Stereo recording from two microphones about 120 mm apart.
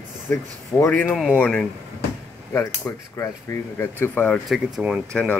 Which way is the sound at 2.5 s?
20° left (ahead or behind).